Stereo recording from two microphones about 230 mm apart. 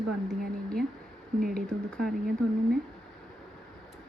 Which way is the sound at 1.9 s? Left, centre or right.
Centre.